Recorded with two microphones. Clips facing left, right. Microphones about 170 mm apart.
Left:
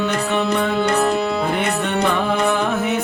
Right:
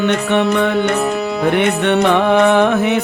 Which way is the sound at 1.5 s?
70° right (ahead or behind).